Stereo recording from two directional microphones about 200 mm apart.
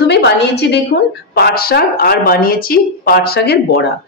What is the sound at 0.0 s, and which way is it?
A woman's voice, 55° left (ahead or behind).